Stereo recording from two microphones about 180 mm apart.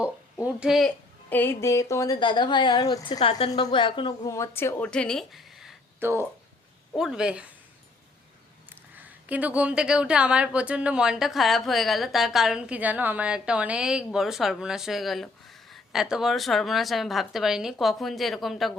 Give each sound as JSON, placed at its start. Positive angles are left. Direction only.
{"t": 0.4, "sound": "speech", "side_deg": -5}
{"t": 6.0, "sound": "a woman's voice", "side_deg": -15}
{"t": 9.0, "sound": "a woman's voice", "side_deg": -10}